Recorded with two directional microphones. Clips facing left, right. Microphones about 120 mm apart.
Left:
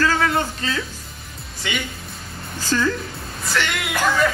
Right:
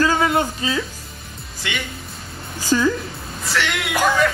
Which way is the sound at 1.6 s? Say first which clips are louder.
Left 1 dB; centre (ahead or behind).